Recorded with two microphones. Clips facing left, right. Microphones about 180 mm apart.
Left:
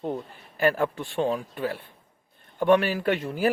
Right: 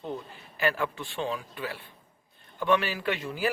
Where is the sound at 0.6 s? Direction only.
45° left (ahead or behind).